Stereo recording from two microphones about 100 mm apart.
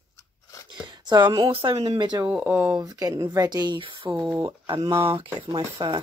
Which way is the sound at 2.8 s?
40° right (ahead or behind).